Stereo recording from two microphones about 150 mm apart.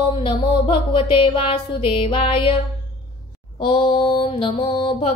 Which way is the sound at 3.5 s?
35° left (ahead or behind).